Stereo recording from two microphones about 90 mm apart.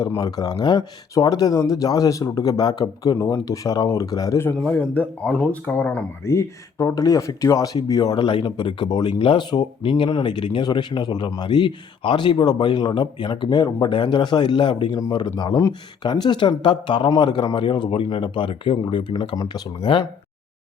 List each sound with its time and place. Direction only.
0.2 s speech: 45° left (ahead or behind)
4.7 s speech: 15° left (ahead or behind)
5.7 s speech: 20° left (ahead or behind)
6.3 s speech: 35° left (ahead or behind); by 9.1 s 55° left (ahead or behind)
9.1 s speech: 75° left (ahead or behind); by 13.7 s 50° left (ahead or behind)
13.9 s speech: 70° left (ahead or behind)
16.0 s speech: 55° left (ahead or behind)
19.4 s speech: 45° left (ahead or behind)